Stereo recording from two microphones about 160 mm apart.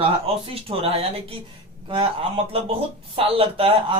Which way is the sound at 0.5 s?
40° right (ahead or behind).